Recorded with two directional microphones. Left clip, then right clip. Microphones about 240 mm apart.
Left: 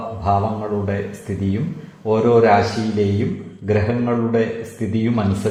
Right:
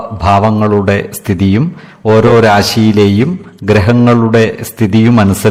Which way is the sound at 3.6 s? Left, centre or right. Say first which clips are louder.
Right 11 dB; right.